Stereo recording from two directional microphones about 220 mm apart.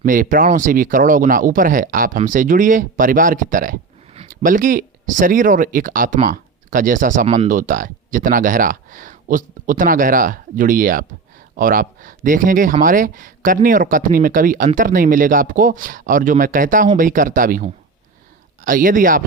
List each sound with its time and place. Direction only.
0.0 s speech: 40° right (ahead or behind)